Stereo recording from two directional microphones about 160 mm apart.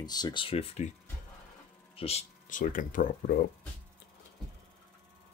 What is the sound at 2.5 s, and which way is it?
Speech, 55° left (ahead or behind).